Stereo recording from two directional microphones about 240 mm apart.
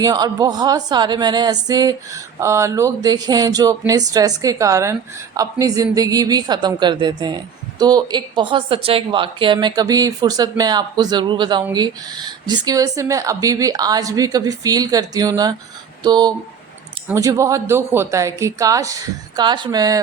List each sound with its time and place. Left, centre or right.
0.0 s speech: centre